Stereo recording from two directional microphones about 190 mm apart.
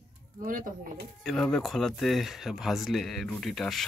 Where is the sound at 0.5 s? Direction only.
45° right (ahead or behind).